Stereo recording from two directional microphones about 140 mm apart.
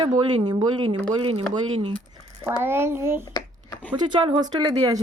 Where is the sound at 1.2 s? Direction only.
40° right (ahead or behind).